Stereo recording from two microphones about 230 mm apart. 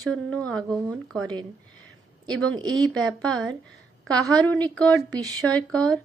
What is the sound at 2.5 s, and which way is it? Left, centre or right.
Speech, centre.